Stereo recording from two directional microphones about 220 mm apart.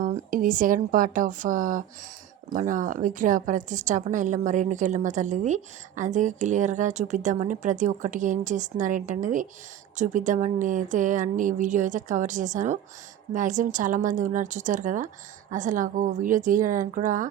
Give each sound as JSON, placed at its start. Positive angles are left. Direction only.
{"t": 0.0, "sound": "speech", "side_deg": -40}